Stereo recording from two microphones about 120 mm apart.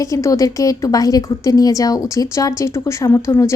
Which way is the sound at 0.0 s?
25° left (ahead or behind).